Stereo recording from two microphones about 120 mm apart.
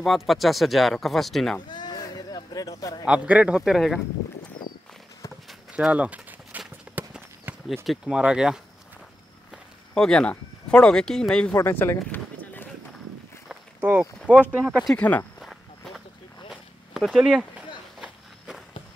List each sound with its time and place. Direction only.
0.0 s speech: centre (ahead or behind)
1.7 s bleat: 35° left (ahead or behind)
3.1 s speech: 10° right (ahead or behind)
5.5 s clip-clop: 5° right (ahead or behind)
7.5 s a sound: 15° right (ahead or behind)
7.8 s speech: 5° right (ahead or behind)
9.9 s speech: 5° left (ahead or behind)
11.5 s speech: 20° left (ahead or behind)
13.7 s speech: 15° right (ahead or behind)
15.0 s speech: 15° left (ahead or behind)
16.9 s speech: centre (ahead or behind)